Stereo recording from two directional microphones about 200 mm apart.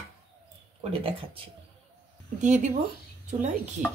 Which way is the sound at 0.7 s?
25° right (ahead or behind).